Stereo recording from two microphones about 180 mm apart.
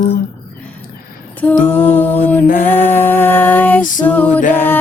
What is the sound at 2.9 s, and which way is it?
Music, 10° left (ahead or behind).